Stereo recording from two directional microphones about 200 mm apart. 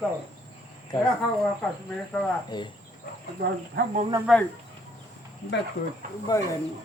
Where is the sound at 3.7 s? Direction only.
50° right (ahead or behind).